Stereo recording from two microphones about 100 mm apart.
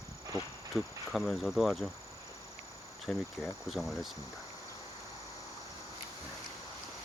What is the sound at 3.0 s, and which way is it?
Speech, centre (ahead or behind).